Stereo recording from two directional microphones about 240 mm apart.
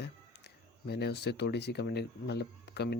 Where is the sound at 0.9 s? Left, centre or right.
Left.